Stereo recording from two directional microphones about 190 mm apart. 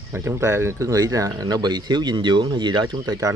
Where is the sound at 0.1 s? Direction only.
15° right (ahead or behind).